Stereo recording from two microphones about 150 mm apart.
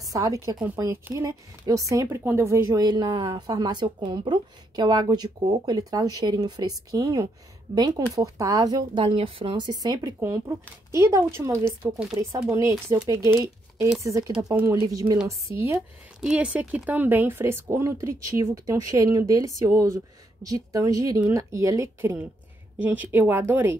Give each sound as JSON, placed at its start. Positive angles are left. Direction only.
{"t": 0.0, "sound": "a woman's voice", "side_deg": -20}
{"t": 11.8, "sound": "speech", "side_deg": -5}
{"t": 12.2, "sound": "a woman's voice", "side_deg": -20}
{"t": 16.2, "sound": "a woman's voice", "side_deg": -5}